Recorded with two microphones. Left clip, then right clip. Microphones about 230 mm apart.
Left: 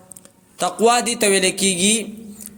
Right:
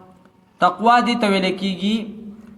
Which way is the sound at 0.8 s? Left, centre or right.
Left.